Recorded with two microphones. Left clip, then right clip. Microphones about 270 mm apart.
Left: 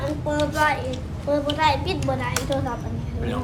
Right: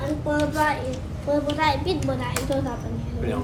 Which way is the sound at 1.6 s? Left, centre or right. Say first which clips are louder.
Left 3 dB; left.